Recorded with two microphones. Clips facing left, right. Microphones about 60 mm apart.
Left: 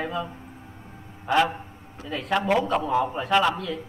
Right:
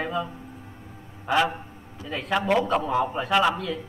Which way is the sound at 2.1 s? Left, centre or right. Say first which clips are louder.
Even; centre.